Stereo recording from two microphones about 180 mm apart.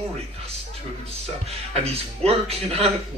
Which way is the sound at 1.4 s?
35° right (ahead or behind).